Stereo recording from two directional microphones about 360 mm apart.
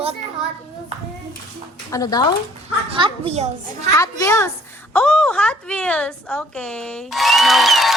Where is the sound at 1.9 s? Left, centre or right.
Centre.